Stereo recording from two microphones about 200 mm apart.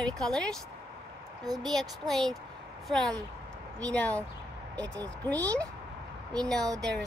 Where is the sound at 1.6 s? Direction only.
Centre (ahead or behind).